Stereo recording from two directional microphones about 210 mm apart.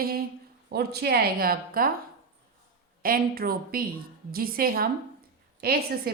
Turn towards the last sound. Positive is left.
turn(degrees=-45)  # may be behind; listen again after turning